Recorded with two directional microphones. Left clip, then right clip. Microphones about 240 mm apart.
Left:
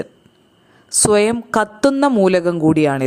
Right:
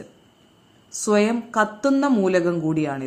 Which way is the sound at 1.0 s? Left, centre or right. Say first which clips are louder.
Left 6 dB; left.